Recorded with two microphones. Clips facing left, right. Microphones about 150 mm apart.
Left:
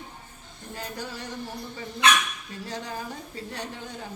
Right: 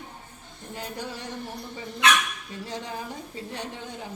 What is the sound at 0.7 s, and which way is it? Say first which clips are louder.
Music: right 1 dB; 20° right (ahead or behind).